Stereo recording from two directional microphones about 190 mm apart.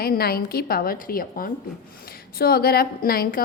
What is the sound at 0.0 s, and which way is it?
A woman's voice, 55° left (ahead or behind).